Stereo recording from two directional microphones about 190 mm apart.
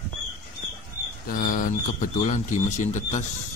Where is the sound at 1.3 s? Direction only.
45° left (ahead or behind).